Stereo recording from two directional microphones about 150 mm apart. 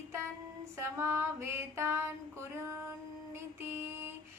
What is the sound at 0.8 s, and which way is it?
A woman's voice, 15° right (ahead or behind).